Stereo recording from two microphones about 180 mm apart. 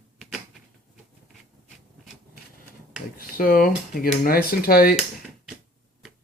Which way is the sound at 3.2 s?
55° left (ahead or behind).